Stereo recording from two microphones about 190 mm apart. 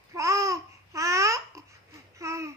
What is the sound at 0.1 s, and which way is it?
Babbling, 15° right (ahead or behind).